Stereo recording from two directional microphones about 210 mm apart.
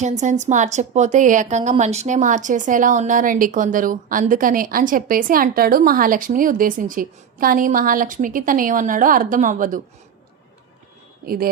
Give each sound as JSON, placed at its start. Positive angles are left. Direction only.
{"t": 0.0, "sound": "a woman's voice", "side_deg": -35}